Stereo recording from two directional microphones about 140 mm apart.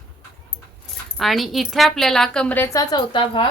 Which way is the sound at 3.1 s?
35° left (ahead or behind).